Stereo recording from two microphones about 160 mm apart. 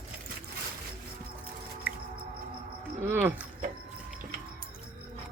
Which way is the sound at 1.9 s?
10° right (ahead or behind).